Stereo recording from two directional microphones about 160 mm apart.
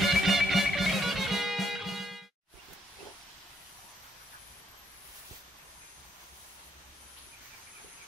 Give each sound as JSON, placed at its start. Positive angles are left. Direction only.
{"t": 0.0, "sound": "music", "side_deg": 0}